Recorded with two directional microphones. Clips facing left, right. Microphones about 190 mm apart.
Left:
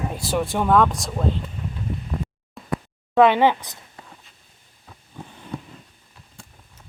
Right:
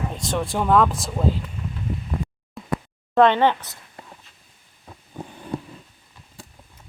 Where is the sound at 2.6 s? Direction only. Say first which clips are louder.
Right 3 dB; centre (ahead or behind).